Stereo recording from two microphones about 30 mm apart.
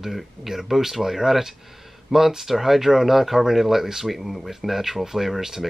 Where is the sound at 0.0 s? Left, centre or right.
Centre.